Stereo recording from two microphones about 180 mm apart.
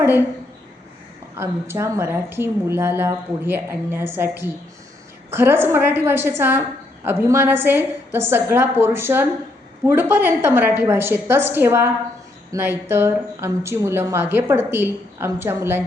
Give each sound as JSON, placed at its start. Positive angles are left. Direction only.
{"t": 1.4, "sound": "speech", "side_deg": -15}